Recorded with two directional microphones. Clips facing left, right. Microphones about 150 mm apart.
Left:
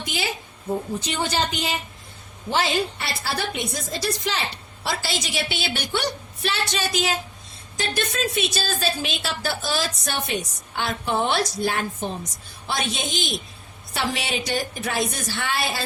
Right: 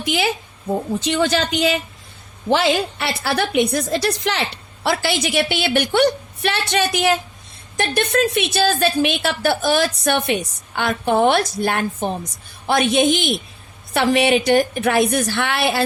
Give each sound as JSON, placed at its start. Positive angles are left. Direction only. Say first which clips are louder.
{"t": 0.0, "sound": "a woman's voice", "louder": "right 8 dB", "side_deg": -70}
{"t": 1.0, "sound": "a woman's voice", "louder": "right 8 dB", "side_deg": -85}